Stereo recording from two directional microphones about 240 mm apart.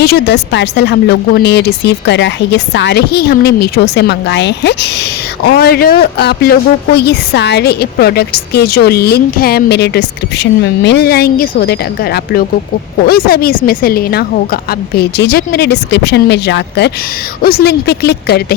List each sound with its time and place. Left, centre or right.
0.0 s a woman's voice: left